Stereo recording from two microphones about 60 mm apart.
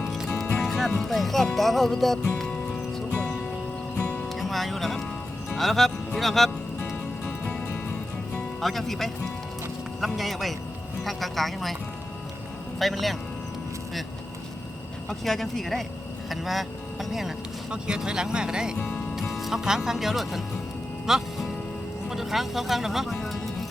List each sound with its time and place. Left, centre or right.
0.6 s music: centre
0.9 s speech: centre
2.3 s music: centre
4.4 s speech: centre
6.7 s music: left
7.9 s music: centre
8.6 s speech: centre
12.8 s speech: centre
15.2 s speech: centre
18.8 s speech: centre
19.3 s speech: centre
21.1 s music: centre
22.1 s speech: centre